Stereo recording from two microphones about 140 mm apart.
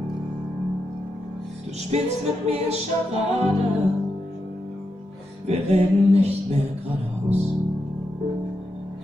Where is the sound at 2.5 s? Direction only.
50° right (ahead or behind).